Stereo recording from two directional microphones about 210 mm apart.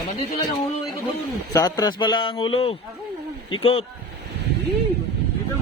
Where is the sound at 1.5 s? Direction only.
15° left (ahead or behind).